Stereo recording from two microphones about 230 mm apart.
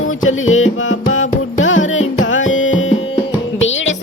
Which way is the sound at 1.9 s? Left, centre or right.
Left.